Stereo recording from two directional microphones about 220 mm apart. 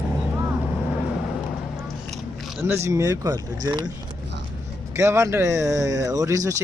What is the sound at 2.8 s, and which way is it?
Speech, 15° right (ahead or behind).